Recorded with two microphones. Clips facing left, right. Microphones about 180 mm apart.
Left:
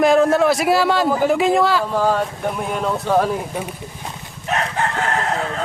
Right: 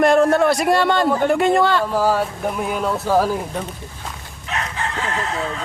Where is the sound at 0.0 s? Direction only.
Centre (ahead or behind).